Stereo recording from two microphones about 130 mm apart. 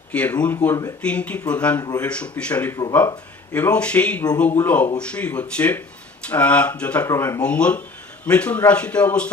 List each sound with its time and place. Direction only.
0.1 s a man's voice: 10° left (ahead or behind)
7.1 s speech: 25° left (ahead or behind)
7.4 s a man's voice: 10° left (ahead or behind)